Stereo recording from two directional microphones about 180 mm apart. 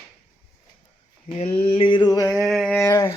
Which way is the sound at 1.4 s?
35° left (ahead or behind).